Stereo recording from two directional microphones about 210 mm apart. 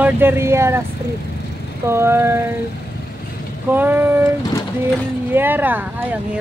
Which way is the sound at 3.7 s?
10° right (ahead or behind).